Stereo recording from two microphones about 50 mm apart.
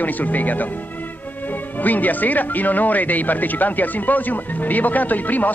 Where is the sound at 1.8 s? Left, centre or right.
Left.